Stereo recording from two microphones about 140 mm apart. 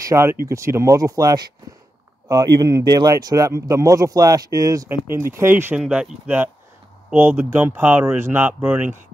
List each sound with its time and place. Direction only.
0.0 s speech: 20° right (ahead or behind)